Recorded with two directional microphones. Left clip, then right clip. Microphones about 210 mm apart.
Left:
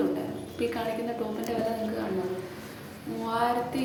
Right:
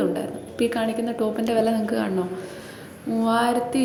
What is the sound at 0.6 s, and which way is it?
Speech, 35° right (ahead or behind).